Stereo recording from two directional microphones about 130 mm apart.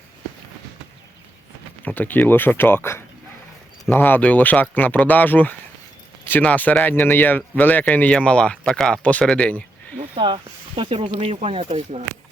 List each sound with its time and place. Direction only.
1.8 s speech: 15° left (ahead or behind)
10.2 s speech: 40° right (ahead or behind); by 12.0 s 55° right (ahead or behind)